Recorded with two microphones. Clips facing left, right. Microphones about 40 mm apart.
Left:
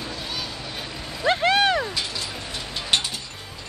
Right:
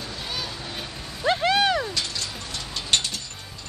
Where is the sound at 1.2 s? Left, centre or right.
Centre.